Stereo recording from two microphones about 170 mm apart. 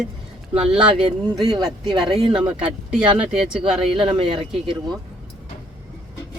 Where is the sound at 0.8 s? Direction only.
35° right (ahead or behind).